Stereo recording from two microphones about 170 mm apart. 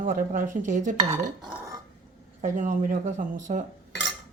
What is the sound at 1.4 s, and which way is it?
Burping, 20° right (ahead or behind).